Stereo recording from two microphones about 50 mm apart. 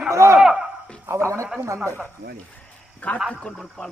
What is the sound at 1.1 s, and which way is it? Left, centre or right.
Speech, right.